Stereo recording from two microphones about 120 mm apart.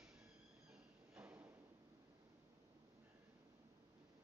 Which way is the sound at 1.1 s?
15° right (ahead or behind).